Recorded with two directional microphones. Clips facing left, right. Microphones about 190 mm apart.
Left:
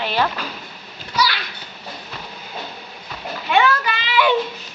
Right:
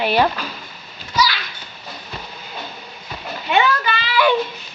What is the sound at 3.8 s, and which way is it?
Child singing, 20° left (ahead or behind).